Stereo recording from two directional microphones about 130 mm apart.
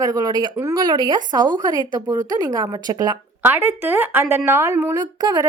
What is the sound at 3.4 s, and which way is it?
A woman's voice, 15° right (ahead or behind).